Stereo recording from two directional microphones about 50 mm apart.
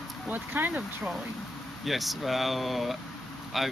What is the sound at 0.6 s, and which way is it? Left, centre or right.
Speech, right.